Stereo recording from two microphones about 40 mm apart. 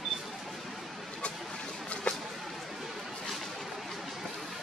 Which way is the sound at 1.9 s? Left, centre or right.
Left.